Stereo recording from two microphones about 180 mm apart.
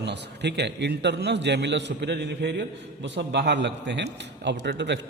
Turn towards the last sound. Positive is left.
turn(degrees=-75)  # may be behind; listen again after turning